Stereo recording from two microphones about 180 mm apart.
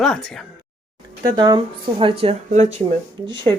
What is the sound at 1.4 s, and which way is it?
Speech, 25° right (ahead or behind).